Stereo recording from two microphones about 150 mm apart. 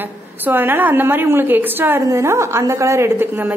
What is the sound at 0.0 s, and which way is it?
A woman's voice, 15° right (ahead or behind).